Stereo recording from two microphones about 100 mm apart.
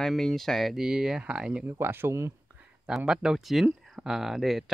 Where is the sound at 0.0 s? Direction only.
5° left (ahead or behind).